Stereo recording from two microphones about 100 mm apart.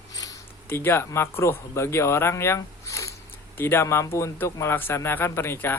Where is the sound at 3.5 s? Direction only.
20° left (ahead or behind).